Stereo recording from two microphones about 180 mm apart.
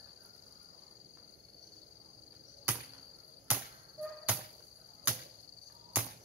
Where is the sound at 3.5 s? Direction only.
10° right (ahead or behind).